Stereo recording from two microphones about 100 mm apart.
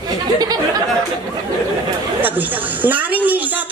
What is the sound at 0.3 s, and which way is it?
Speech, 40° right (ahead or behind).